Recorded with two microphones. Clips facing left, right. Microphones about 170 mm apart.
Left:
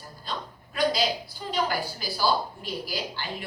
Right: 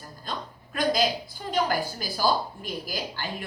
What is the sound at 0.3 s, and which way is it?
A woman's voice, 45° right (ahead or behind).